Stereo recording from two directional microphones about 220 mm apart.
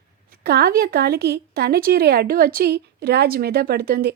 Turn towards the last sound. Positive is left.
turn(degrees=-45)  # may be behind; listen again after turning